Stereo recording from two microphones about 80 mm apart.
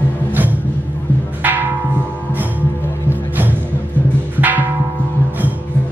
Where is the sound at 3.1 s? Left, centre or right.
Right.